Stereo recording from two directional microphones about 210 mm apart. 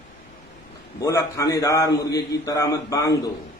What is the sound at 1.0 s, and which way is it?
A man's voice, 15° left (ahead or behind).